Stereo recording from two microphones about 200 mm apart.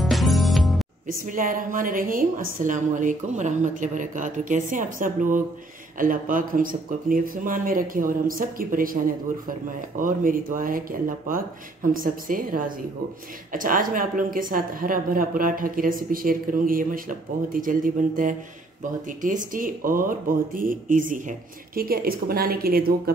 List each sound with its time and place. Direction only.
0.0 s music: centre (ahead or behind)
1.0 s a woman's voice: 40° right (ahead or behind)